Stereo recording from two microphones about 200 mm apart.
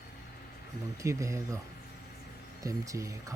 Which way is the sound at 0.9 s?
15° right (ahead or behind).